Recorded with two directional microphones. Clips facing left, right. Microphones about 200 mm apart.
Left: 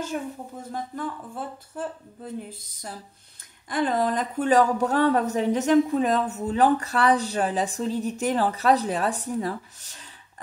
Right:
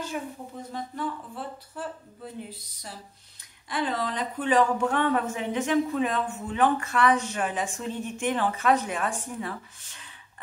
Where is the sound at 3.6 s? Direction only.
45° left (ahead or behind).